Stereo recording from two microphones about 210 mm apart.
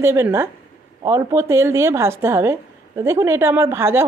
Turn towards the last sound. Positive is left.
turn(degrees=-10)  # may be behind; listen again after turning